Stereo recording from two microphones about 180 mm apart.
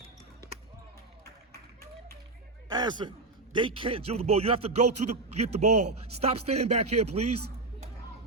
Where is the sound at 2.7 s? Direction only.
25° right (ahead or behind).